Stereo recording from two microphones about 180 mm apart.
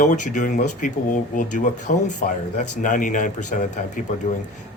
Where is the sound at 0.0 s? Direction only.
45° left (ahead or behind).